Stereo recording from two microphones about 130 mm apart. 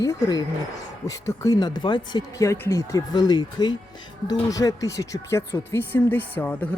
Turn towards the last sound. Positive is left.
turn(degrees=10)  # may be behind; listen again after turning